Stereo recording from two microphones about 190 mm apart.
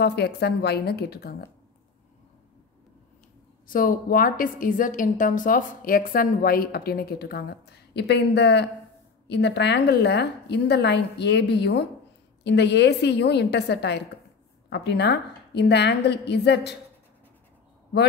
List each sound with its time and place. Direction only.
0.0 s a woman's voice: 60° left (ahead or behind)
3.6 s a woman's voice: 45° left (ahead or behind)